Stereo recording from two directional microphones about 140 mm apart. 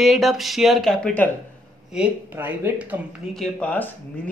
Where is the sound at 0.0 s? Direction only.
Centre (ahead or behind).